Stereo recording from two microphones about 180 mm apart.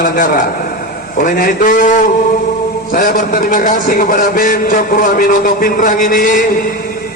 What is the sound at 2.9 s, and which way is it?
A man's voice, 50° left (ahead or behind).